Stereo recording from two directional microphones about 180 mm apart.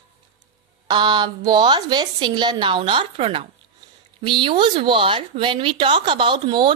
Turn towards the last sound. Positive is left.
turn(degrees=-25)  # may be behind; listen again after turning